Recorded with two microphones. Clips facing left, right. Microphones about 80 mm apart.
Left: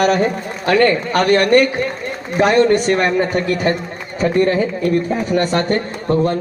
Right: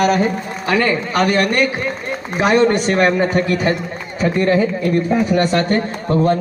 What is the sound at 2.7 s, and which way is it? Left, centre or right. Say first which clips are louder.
Speech: even; centre.